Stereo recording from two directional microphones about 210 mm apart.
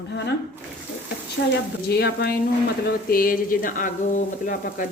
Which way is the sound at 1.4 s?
50° left (ahead or behind).